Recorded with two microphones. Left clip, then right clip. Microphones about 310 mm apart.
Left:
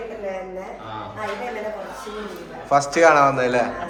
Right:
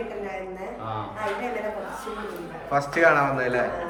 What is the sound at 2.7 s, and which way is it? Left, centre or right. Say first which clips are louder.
Speech: left 5 dB; centre.